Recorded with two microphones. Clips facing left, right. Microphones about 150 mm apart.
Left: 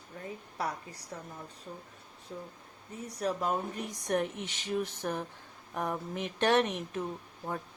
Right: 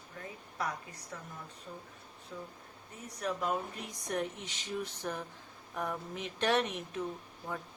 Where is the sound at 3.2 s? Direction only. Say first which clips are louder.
Left 4 dB; 35° left (ahead or behind).